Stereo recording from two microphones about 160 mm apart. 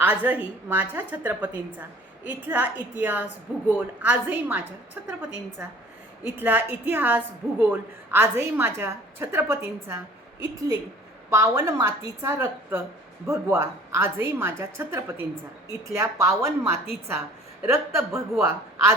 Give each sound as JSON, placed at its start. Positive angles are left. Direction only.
{"t": 0.0, "sound": "a woman's voice", "side_deg": -10}
{"t": 11.3, "sound": "a woman's voice", "side_deg": -15}